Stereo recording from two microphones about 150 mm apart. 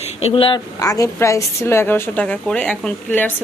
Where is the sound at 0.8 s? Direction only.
20° left (ahead or behind).